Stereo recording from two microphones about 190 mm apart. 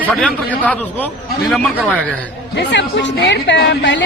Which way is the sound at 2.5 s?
65° left (ahead or behind).